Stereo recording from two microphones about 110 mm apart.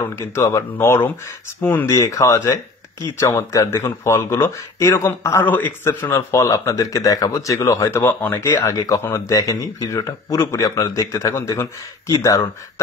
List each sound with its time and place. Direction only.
0.3 s speech: 25° left (ahead or behind)
1.9 s speech: 30° left (ahead or behind)